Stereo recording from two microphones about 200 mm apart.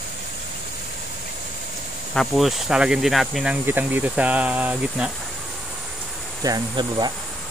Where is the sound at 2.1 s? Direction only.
Centre (ahead or behind).